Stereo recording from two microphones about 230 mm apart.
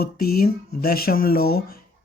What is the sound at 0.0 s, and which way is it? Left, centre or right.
Speech, left.